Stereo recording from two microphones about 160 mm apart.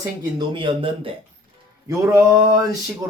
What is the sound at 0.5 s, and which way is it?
Speech, 35° right (ahead or behind).